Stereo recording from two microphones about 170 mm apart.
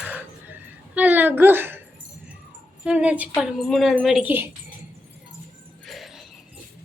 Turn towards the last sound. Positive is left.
turn(degrees=0)  # may be behind; listen again after turning